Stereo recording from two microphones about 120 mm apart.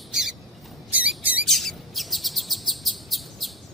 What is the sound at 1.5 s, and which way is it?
Chirp, centre (ahead or behind).